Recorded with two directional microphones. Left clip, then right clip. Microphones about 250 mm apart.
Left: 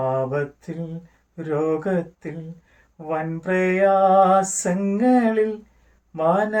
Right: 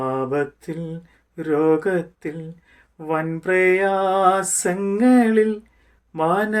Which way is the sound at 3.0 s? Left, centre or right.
Right.